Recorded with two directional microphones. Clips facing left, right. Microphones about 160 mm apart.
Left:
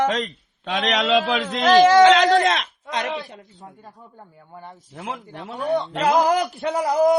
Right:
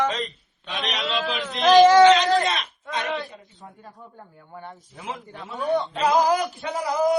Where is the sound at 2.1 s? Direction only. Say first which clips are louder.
Left 2 dB; 90° left.